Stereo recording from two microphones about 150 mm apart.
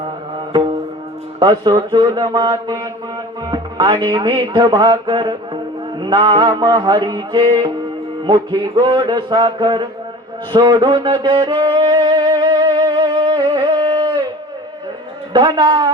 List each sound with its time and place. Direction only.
0.0 s music: 35° right (ahead or behind)
1.4 s a man's voice: 30° right (ahead or behind)
1.9 s music: 30° right (ahead or behind)
6.0 s a man's voice: 35° right (ahead or behind)
6.6 s music: 30° right (ahead or behind)
15.3 s a man's voice: 30° right (ahead or behind)